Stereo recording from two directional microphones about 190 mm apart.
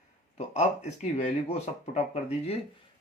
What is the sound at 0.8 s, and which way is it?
Speech, 35° left (ahead or behind).